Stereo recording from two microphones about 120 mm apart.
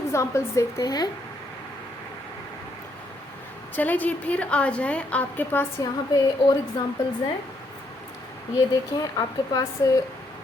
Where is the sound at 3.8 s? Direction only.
15° left (ahead or behind).